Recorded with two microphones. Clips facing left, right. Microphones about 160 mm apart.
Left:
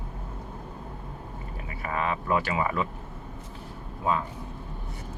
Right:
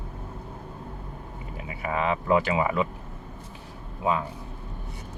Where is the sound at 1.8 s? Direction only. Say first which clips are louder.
Right 3 dB; 20° right (ahead or behind).